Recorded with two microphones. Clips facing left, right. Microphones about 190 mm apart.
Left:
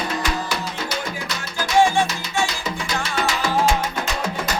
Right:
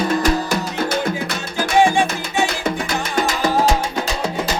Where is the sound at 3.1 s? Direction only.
40° right (ahead or behind).